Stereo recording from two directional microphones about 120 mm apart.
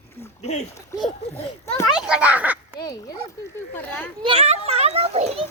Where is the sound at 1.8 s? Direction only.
5° right (ahead or behind).